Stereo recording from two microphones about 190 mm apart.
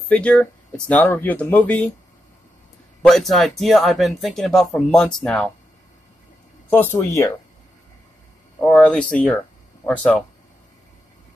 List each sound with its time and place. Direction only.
0.1 s speech: 5° left (ahead or behind)
3.0 s speech: centre (ahead or behind)
6.7 s speech: 15° left (ahead or behind)
8.5 s speech: 5° left (ahead or behind)